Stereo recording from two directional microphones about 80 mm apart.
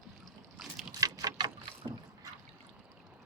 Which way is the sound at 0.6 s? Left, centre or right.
Centre.